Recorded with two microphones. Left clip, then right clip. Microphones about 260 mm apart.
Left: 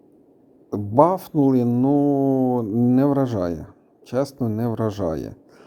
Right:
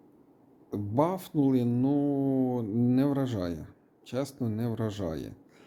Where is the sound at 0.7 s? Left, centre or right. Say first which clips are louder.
Left 11 dB; left.